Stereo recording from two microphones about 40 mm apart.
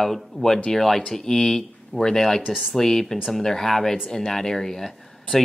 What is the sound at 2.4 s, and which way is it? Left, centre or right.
Speech, centre.